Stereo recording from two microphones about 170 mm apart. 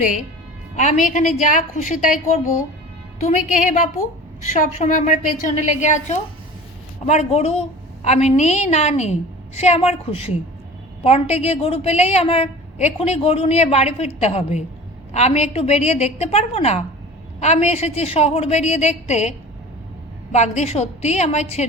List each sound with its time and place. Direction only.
0.8 s a woman's voice: 50° left (ahead or behind)
20.3 s a woman's voice: 40° left (ahead or behind)